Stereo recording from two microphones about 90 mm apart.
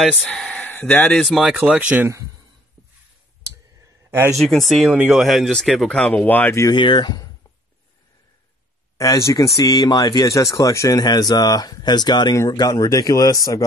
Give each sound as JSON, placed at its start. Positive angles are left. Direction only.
{"t": 0.6, "sound": "speech", "side_deg": 20}
{"t": 1.2, "sound": "speech", "side_deg": 0}
{"t": 1.5, "sound": "speech", "side_deg": -15}
{"t": 4.1, "sound": "speech", "side_deg": -30}
{"t": 4.4, "sound": "speech", "side_deg": 0}
{"t": 4.8, "sound": "speech", "side_deg": -15}
{"t": 5.1, "sound": "speech", "side_deg": 0}
{"t": 6.7, "sound": "speech", "side_deg": 60}
{"t": 8.9, "sound": "speech", "side_deg": 40}
{"t": 11.0, "sound": "speech", "side_deg": 50}